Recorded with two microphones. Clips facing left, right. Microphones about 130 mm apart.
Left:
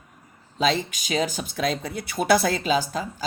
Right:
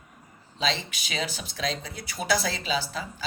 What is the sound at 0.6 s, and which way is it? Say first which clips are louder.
Speech: left 6 dB; 50° left (ahead or behind).